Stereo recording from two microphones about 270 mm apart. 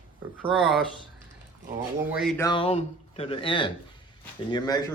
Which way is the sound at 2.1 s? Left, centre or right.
Centre.